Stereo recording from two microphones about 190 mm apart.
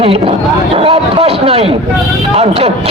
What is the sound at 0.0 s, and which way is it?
A man's voice, 30° right (ahead or behind).